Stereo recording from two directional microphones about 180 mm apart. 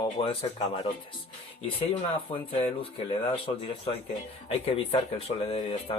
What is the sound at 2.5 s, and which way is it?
Speech, 35° left (ahead or behind).